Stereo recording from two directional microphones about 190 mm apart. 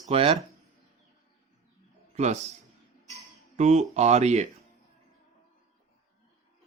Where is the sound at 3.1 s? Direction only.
35° right (ahead or behind).